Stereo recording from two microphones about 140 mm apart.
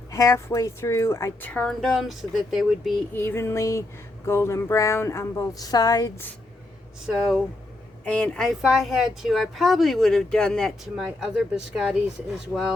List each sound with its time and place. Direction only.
0.1 s a woman's voice: 20° left (ahead or behind); by 2.9 s centre (ahead or behind)
3.1 s speech: 15° left (ahead or behind)
7.0 s speech: 5° right (ahead or behind)
8.0 s speech: 5° left (ahead or behind)